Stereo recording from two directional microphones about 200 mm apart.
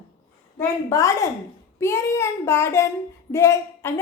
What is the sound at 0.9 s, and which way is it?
A woman's voice, 15° left (ahead or behind).